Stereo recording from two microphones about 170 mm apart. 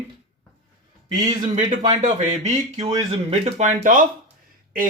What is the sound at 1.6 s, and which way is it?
Speech, 45° right (ahead or behind).